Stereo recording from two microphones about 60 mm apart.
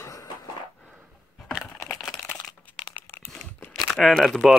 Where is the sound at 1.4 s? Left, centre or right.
Centre.